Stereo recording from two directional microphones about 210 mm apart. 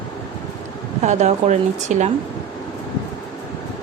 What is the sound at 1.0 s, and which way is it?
Speech, 35° right (ahead or behind).